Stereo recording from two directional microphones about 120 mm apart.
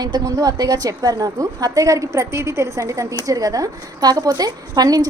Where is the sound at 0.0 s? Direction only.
35° right (ahead or behind).